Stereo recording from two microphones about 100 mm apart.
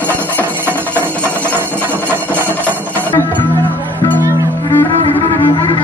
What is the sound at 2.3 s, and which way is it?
Music, 15° left (ahead or behind).